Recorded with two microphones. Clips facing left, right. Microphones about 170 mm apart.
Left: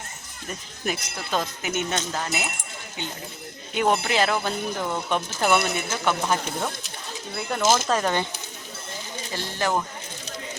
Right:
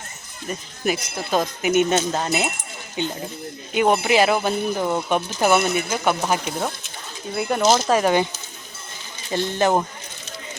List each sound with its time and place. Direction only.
0.4 s speech: 10° right (ahead or behind)
9.3 s speech: 20° right (ahead or behind)